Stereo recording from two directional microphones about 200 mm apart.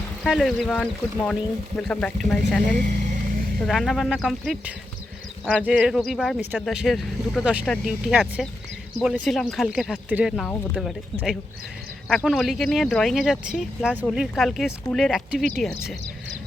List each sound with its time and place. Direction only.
0.3 s speech: centre (ahead or behind)
2.7 s speech: 40° right (ahead or behind)
3.6 s speech: centre (ahead or behind)